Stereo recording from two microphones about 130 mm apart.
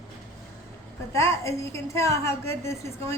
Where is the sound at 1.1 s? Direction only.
20° left (ahead or behind).